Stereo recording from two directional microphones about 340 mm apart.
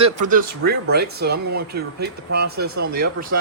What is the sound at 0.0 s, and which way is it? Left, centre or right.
Speech, right.